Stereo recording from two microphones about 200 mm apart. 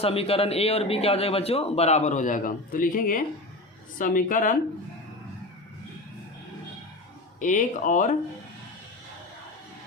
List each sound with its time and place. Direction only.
0.0 s a man's voice: 30° left (ahead or behind)
7.3 s a man's voice: 40° left (ahead or behind)